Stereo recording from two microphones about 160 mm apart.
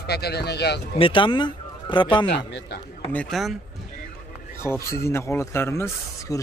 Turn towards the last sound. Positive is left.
turn(degrees=15)  # may be behind; listen again after turning